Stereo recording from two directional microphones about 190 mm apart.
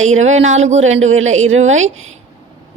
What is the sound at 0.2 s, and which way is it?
Speech, 35° right (ahead or behind).